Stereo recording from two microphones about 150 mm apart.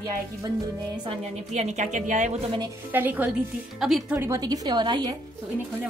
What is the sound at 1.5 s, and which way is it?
Speech, 50° right (ahead or behind).